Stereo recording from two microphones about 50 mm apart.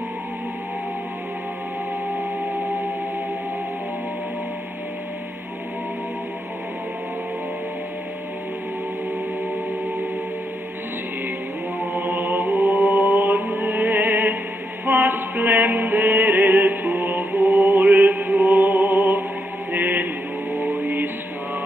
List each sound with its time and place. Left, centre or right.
11.8 s chant: right
14.9 s music: right
19.7 s mantra: right
20.5 s chant: right